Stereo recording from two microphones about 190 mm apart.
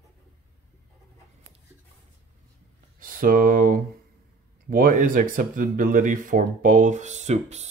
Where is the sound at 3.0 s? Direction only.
45° right (ahead or behind).